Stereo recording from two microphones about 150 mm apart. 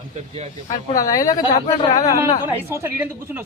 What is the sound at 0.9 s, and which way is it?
Speech, 25° left (ahead or behind).